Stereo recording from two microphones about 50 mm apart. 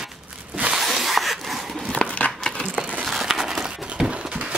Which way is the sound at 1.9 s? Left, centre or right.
Left.